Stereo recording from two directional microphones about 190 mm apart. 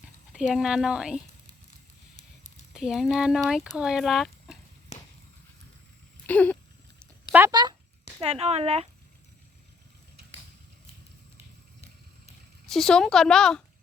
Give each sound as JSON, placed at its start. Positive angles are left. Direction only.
{"t": 0.3, "sound": "speech", "side_deg": -5}
{"t": 2.7, "sound": "speech", "side_deg": 0}
{"t": 4.9, "sound": "a sound", "side_deg": 35}
{"t": 6.2, "sound": "a sound", "side_deg": 10}
{"t": 7.3, "sound": "speech", "side_deg": -15}
{"t": 8.2, "sound": "speech", "side_deg": -30}
{"t": 12.6, "sound": "speech", "side_deg": 5}